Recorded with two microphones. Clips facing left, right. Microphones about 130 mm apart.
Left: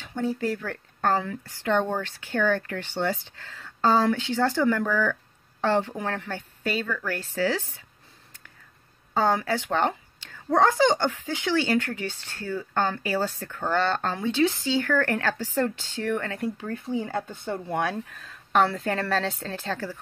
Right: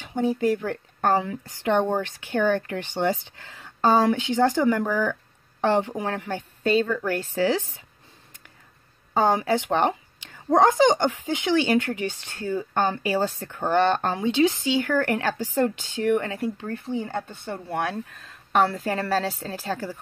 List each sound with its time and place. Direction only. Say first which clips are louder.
0.0 s a woman's voice: right 4 dB; 15° right (ahead or behind)
6.6 s speech: right 7 dB; 30° right (ahead or behind)
9.1 s a woman's voice: right 3 dB; 15° right (ahead or behind)
16.3 s a woman's voice: right 1 dB; centre (ahead or behind)
17.2 s speech: left 2 dB; 15° left (ahead or behind)
17.6 s a woman's voice: right 1 dB; centre (ahead or behind)